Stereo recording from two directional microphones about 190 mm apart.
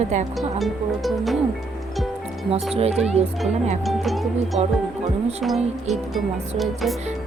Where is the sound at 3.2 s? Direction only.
35° right (ahead or behind).